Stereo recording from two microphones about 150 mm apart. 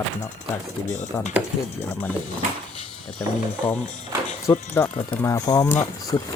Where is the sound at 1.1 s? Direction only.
20° left (ahead or behind).